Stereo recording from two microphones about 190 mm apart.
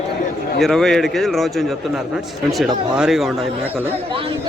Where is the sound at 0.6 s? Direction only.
5° left (ahead or behind).